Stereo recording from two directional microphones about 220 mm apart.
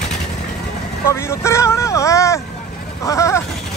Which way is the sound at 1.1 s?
10° left (ahead or behind).